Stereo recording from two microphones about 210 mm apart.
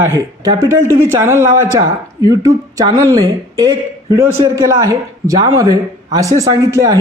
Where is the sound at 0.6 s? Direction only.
10° right (ahead or behind).